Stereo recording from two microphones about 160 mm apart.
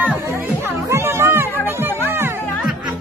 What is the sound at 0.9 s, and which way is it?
Music, 15° right (ahead or behind).